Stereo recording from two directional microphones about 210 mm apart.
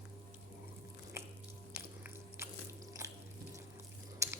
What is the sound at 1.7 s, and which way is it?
Biting, 10° right (ahead or behind).